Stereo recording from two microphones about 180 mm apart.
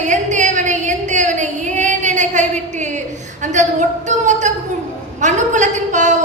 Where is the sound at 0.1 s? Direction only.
40° right (ahead or behind).